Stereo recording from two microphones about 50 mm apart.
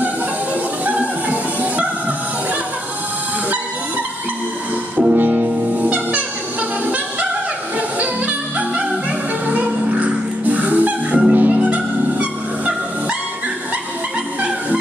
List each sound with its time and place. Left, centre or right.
0.8 s music: right
4.9 s music: right
8.0 s music: right